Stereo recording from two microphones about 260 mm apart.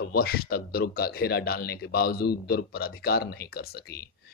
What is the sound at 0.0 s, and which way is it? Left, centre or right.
Speech, left.